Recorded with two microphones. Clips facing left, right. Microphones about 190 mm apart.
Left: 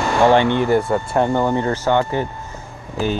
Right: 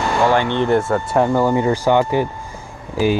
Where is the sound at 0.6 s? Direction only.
Centre (ahead or behind).